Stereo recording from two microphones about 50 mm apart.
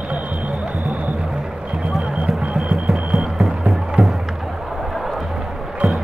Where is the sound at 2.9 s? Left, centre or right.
Centre.